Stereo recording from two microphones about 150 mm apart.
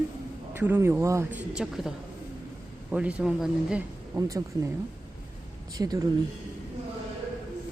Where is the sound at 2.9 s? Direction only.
5° right (ahead or behind).